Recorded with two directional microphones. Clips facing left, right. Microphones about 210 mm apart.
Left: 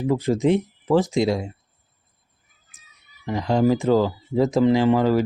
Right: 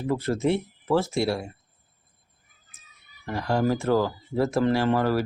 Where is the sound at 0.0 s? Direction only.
15° left (ahead or behind).